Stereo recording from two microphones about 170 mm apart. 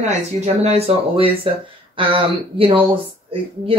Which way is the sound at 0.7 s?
35° right (ahead or behind).